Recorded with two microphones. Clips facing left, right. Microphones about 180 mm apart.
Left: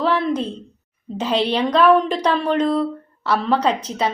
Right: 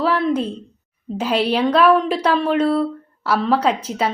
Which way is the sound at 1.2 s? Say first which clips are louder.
Right 1 dB; 10° right (ahead or behind).